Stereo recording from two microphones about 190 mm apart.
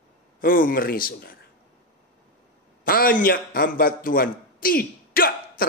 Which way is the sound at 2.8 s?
50° left (ahead or behind).